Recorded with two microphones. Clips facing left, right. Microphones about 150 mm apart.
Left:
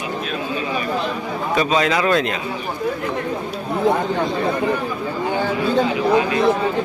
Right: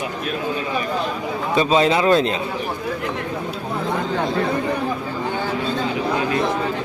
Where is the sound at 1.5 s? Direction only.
25° right (ahead or behind).